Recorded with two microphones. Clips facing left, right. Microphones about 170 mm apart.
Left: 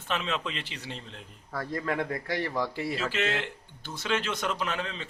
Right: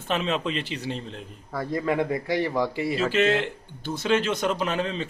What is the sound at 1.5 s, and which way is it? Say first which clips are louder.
A man's voice: right 5 dB; 15° right (ahead or behind).